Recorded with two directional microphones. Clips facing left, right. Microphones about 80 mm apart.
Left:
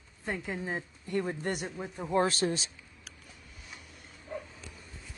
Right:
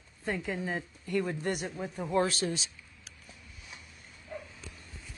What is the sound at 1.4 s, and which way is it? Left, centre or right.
Speech, left.